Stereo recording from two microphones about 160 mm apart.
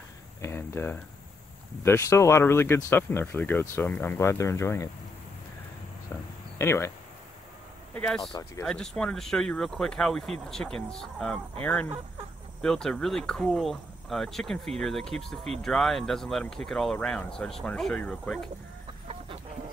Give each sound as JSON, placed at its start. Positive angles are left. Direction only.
{"t": 0.4, "sound": "a sound", "side_deg": 15}
{"t": 1.8, "sound": "speech", "side_deg": 15}
{"t": 6.6, "sound": "speech", "side_deg": 15}
{"t": 7.9, "sound": "speech", "side_deg": 5}
{"t": 8.2, "sound": "speech", "side_deg": 25}
{"t": 8.6, "sound": "speech", "side_deg": 5}